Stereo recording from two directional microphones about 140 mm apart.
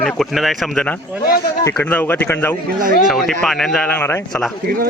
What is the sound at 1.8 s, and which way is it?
Speech, 15° left (ahead or behind).